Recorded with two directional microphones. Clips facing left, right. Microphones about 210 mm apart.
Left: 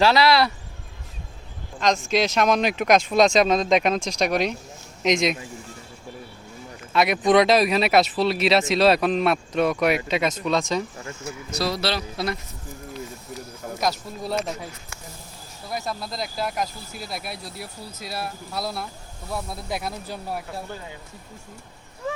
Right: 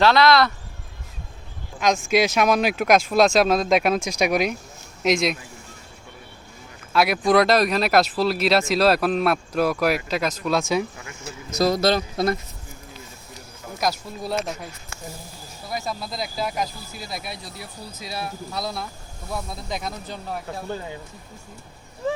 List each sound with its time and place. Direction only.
0.0 s speech: 10° left (ahead or behind)
2.0 s speech: 10° right (ahead or behind)
6.9 s speech: centre (ahead or behind)
11.6 s speech: 45° right (ahead or behind)
13.7 s speech: centre (ahead or behind)
15.7 s speech: centre (ahead or behind)